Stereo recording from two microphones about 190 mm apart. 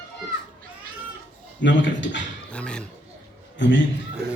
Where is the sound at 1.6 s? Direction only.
75° left (ahead or behind).